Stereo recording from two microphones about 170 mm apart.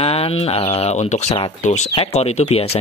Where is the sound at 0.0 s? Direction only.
35° left (ahead or behind).